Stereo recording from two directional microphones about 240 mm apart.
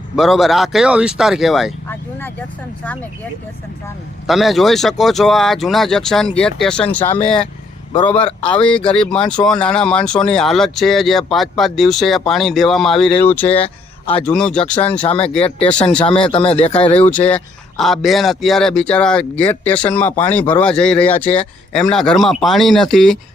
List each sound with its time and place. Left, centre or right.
0.2 s speech: centre
4.3 s speech: centre
7.9 s a man's voice: left
8.9 s speech: centre
15.4 s a man's voice: left
15.6 s speech: centre
16.3 s a man's voice: left
17.0 s speech: centre